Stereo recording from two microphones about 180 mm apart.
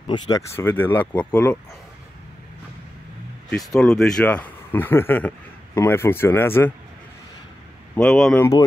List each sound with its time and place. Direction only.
0.0 s speech: 25° left (ahead or behind)
0.6 s speech: 10° left (ahead or behind)
3.4 s speech: centre (ahead or behind)
7.9 s speech: 5° left (ahead or behind)